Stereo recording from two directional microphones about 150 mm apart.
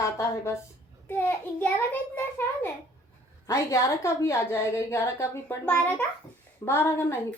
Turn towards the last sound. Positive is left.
turn(degrees=15)  # may be behind; listen again after turning